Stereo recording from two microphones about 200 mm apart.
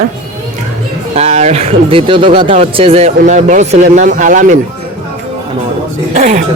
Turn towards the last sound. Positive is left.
turn(degrees=-45)  # may be behind; listen again after turning